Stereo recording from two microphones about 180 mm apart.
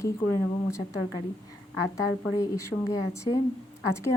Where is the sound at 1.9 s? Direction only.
15° left (ahead or behind).